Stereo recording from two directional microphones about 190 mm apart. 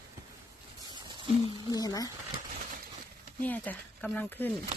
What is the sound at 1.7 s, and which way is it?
Speech, 20° left (ahead or behind).